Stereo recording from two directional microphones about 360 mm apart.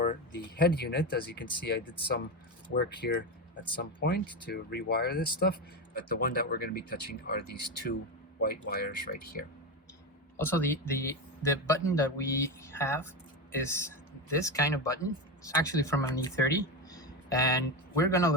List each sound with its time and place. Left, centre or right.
0.0 s speech: left
10.3 s a man's voice: centre